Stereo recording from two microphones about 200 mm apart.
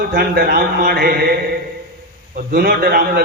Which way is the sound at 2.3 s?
45° right (ahead or behind).